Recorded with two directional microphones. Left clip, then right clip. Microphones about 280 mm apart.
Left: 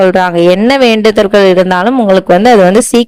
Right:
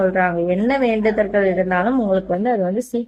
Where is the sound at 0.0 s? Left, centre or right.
Left.